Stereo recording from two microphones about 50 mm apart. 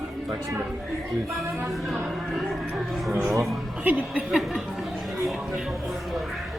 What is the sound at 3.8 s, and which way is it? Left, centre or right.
Speech, right.